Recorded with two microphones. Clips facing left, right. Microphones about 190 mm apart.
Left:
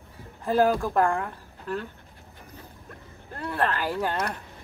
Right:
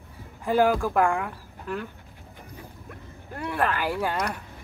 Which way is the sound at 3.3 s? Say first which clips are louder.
Right 1 dB; 10° right (ahead or behind).